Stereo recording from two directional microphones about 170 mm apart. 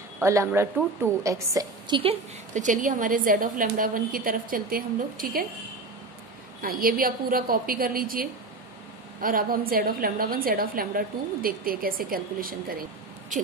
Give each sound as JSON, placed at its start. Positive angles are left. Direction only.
{"t": 0.2, "sound": "a woman's voice", "side_deg": -15}
{"t": 2.5, "sound": "a woman's voice", "side_deg": -50}
{"t": 6.6, "sound": "a woman's voice", "side_deg": -60}